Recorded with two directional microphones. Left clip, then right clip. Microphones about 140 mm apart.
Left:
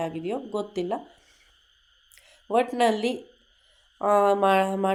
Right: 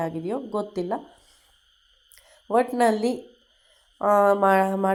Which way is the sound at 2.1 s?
15° right (ahead or behind).